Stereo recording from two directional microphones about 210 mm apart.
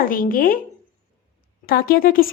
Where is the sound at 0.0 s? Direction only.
40° left (ahead or behind).